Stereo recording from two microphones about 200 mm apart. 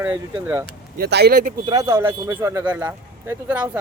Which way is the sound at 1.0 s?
50° right (ahead or behind).